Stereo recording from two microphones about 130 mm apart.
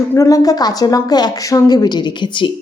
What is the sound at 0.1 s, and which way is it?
A woman's voice, 25° left (ahead or behind).